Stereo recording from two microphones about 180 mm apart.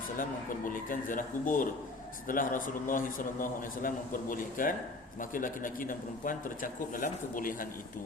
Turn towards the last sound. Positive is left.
turn(degrees=50)  # may be behind; listen again after turning